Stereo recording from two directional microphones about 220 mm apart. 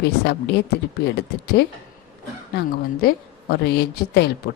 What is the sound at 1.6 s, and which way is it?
A woman's voice, 50° left (ahead or behind).